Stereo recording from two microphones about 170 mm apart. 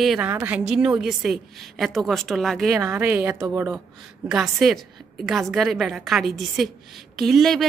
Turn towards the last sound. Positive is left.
turn(degrees=0)  # may be behind; listen again after turning